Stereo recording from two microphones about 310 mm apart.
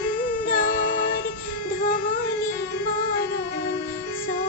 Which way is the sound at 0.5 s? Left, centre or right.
Left.